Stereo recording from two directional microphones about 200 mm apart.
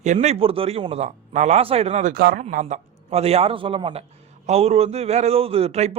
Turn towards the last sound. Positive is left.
turn(degrees=-30)  # may be behind; listen again after turning